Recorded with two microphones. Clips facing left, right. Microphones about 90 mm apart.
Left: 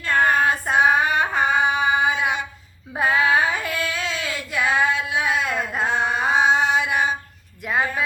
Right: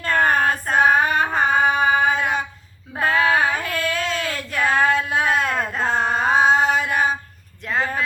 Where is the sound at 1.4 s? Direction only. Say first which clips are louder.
Right 3 dB; 45° right (ahead or behind).